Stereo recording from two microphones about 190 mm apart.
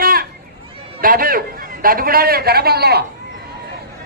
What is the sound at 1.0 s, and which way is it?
A man's voice, 50° right (ahead or behind).